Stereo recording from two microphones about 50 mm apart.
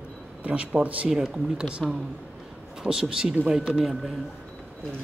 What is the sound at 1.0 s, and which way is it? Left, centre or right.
Speech, centre.